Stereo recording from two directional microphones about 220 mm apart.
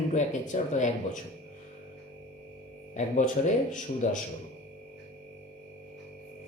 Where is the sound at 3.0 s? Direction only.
35° left (ahead or behind).